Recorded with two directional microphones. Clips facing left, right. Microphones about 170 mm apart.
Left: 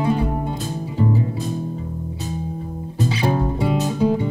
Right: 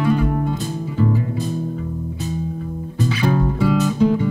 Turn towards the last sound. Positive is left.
turn(degrees=25)  # may be behind; listen again after turning